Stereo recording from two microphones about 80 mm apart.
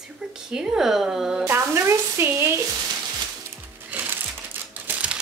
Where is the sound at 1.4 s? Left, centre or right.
Right.